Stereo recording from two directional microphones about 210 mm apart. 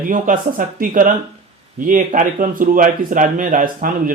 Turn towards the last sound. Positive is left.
turn(degrees=-40)  # may be behind; listen again after turning